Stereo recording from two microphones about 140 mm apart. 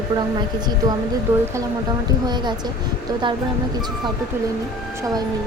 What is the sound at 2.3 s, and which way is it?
Speech, 30° right (ahead or behind).